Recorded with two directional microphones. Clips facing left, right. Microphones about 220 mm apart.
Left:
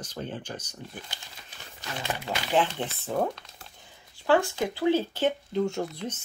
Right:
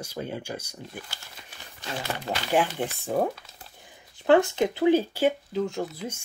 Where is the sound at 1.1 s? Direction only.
20° left (ahead or behind).